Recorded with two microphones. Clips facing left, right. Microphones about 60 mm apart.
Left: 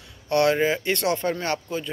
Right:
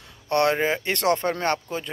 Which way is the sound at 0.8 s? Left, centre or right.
Right.